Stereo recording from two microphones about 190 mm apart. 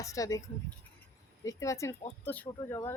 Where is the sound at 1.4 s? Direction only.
15° left (ahead or behind).